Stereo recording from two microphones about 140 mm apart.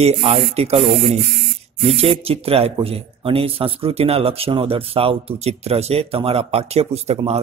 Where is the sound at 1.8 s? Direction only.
45° right (ahead or behind).